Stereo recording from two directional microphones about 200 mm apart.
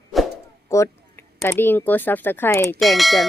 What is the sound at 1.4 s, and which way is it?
A woman's voice, 10° left (ahead or behind).